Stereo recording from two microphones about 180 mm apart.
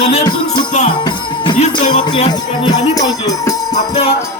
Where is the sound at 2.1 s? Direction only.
25° left (ahead or behind).